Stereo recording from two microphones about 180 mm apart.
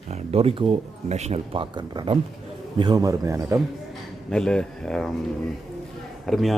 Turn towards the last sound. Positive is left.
turn(degrees=0)  # may be behind; listen again after turning